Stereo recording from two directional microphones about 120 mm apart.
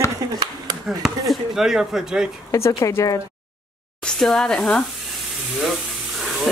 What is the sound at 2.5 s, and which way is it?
Speech, 25° left (ahead or behind).